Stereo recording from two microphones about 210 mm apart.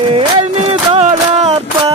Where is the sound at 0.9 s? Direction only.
30° right (ahead or behind).